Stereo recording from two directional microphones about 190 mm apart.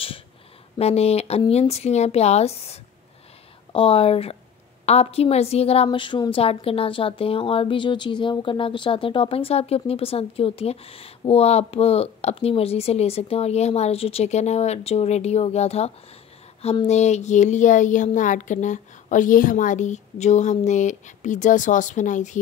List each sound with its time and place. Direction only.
0.7 s a woman's voice: 35° left (ahead or behind)